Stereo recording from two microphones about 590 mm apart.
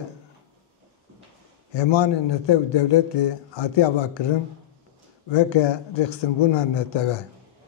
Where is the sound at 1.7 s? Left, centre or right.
Left.